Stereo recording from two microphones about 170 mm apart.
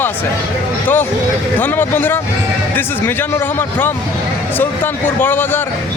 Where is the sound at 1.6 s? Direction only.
10° left (ahead or behind).